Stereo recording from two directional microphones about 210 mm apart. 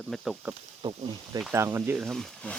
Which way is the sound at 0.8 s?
25° right (ahead or behind).